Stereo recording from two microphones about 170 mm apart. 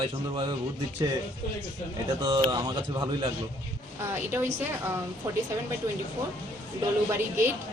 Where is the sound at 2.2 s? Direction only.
30° right (ahead or behind).